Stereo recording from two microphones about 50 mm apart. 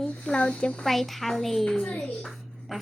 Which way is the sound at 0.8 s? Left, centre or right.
Centre.